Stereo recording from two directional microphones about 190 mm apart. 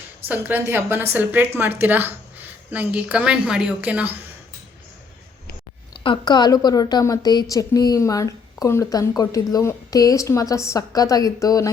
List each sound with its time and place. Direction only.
0.3 s a woman's voice: 10° right (ahead or behind)
5.9 s a woman's voice: 25° left (ahead or behind)